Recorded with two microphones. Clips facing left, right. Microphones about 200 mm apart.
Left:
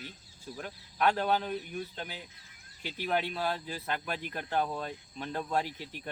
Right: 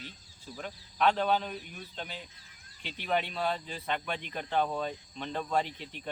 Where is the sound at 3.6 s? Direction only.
5° left (ahead or behind).